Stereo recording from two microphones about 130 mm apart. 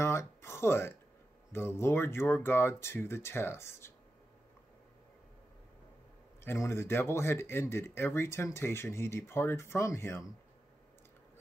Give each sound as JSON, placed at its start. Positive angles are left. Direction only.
{"t": 0.0, "sound": "a sound", "side_deg": 20}
{"t": 1.5, "sound": "speech", "side_deg": 20}
{"t": 6.4, "sound": "speech", "side_deg": 20}